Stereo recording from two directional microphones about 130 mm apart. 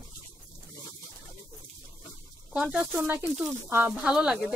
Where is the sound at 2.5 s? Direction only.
5° right (ahead or behind).